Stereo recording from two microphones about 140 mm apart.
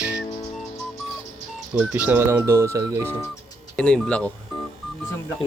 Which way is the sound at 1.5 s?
10° right (ahead or behind).